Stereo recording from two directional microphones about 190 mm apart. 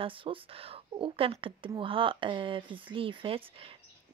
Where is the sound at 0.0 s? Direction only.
30° right (ahead or behind).